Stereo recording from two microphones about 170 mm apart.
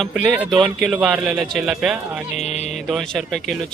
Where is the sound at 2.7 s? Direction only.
Centre (ahead or behind).